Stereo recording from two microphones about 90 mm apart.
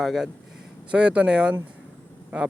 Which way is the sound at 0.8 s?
10° right (ahead or behind).